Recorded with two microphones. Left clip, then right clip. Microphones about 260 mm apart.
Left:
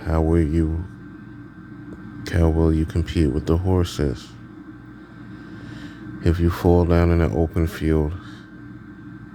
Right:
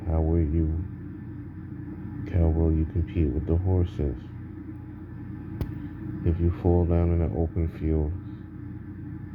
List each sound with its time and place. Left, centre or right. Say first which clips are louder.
0.0 s speech: left 8 dB; left
2.2 s a sound: left 8 dB; left
2.5 s speech: left 7 dB; left
2.7 s speech: left 7 dB; left
6.2 s speech: left 8 dB; left